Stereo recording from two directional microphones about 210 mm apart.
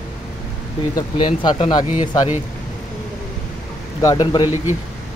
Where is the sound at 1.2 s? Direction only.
30° left (ahead or behind).